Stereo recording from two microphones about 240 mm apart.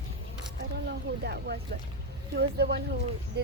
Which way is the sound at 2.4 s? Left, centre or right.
Right.